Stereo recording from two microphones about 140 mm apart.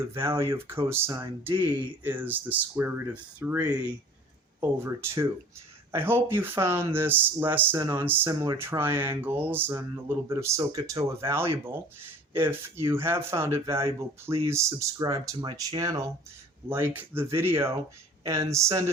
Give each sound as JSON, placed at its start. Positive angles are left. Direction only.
{"t": 0.1, "sound": "speech", "side_deg": -20}